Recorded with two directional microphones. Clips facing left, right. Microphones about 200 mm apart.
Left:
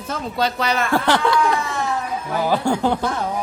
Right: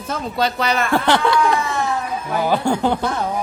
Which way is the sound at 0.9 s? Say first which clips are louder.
Right 1 dB; 25° right (ahead or behind).